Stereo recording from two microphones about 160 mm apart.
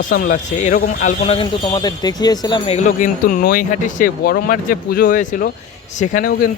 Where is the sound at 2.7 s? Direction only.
50° left (ahead or behind).